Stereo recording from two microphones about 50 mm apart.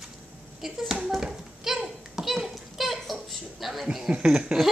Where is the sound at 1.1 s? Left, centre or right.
Centre.